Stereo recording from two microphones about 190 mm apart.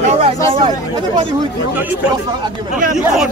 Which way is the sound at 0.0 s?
30° right (ahead or behind).